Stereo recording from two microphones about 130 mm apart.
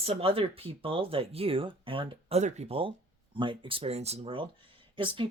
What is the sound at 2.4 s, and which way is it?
Speech, 60° right (ahead or behind).